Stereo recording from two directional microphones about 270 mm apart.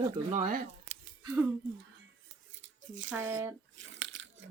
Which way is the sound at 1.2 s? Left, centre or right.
Centre.